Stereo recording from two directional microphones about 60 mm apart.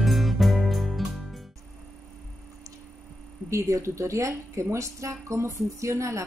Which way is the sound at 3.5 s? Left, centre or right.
Right.